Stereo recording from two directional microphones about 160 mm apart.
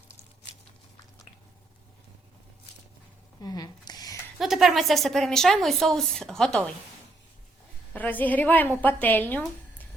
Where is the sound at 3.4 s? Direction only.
25° left (ahead or behind).